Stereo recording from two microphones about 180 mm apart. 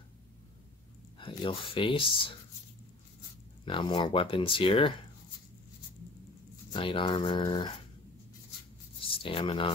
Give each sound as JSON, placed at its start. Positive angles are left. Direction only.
{"t": 1.1, "sound": "speech", "side_deg": 30}
{"t": 3.6, "sound": "speech", "side_deg": 25}
{"t": 6.7, "sound": "speech", "side_deg": 30}
{"t": 9.0, "sound": "speech", "side_deg": 30}